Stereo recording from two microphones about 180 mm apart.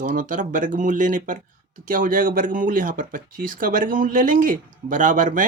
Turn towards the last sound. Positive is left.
turn(degrees=-45)  # may be behind; listen again after turning